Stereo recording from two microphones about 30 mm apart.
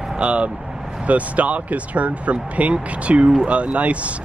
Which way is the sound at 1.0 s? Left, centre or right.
Right.